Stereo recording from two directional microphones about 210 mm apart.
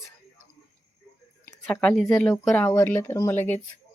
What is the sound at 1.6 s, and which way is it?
Speech, 10° left (ahead or behind).